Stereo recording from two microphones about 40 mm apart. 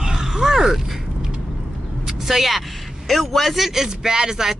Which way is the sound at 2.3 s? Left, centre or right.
Centre.